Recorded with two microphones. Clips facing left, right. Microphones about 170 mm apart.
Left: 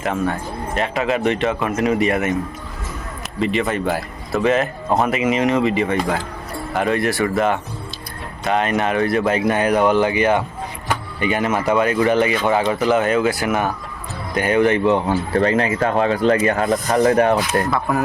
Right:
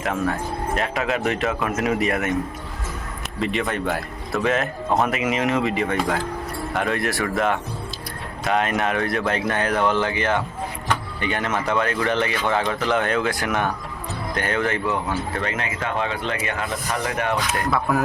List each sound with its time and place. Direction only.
0.0 s speech: centre (ahead or behind)
3.4 s speech: centre (ahead or behind); by 17.4 s 35° left (ahead or behind)
17.7 s speech: centre (ahead or behind)